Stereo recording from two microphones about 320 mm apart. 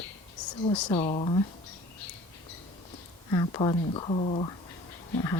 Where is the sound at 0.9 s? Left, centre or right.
Centre.